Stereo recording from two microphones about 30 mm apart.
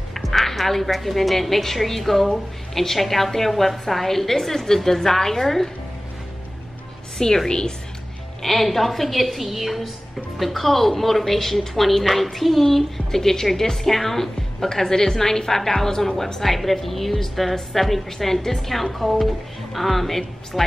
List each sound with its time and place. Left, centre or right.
0.1 s a woman's voice: centre
7.2 s a woman's voice: left
8.4 s a woman's voice: centre